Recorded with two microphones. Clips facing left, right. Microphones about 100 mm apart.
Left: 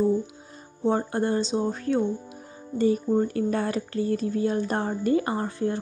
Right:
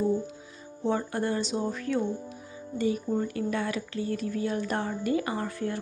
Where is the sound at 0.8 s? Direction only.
30° left (ahead or behind).